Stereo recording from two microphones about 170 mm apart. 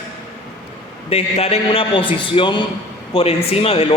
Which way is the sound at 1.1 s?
35° left (ahead or behind).